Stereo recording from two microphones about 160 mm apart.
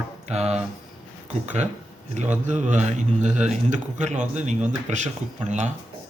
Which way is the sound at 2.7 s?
50° right (ahead or behind).